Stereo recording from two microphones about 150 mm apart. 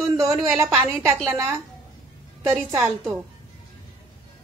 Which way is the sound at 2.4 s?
15° right (ahead or behind).